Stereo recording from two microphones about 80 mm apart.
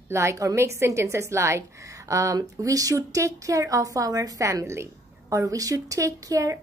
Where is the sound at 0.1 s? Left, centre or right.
Right.